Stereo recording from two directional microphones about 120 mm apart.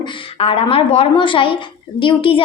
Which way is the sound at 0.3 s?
50° left (ahead or behind).